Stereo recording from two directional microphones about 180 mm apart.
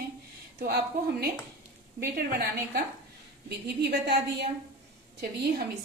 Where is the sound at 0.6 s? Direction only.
65° right (ahead or behind).